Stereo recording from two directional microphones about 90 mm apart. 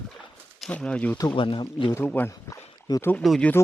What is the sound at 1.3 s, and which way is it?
Speech, 70° left (ahead or behind).